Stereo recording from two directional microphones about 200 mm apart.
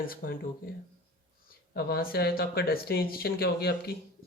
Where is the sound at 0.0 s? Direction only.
45° left (ahead or behind).